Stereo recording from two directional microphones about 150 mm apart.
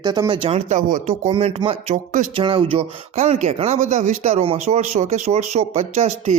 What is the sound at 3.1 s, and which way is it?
A man's voice, 45° right (ahead or behind).